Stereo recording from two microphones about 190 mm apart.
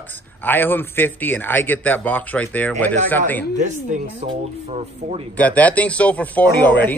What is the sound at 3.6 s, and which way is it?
Speech, 40° right (ahead or behind).